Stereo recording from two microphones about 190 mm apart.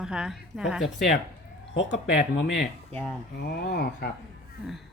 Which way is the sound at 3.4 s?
55° left (ahead or behind).